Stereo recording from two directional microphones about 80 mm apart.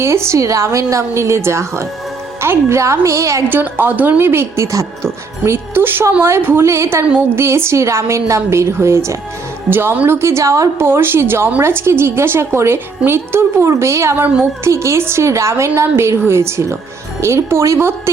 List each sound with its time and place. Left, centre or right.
0.0 s a woman's voice: right
3.5 s a woman's voice: right
5.5 s a woman's voice: right
10.2 s a woman's voice: right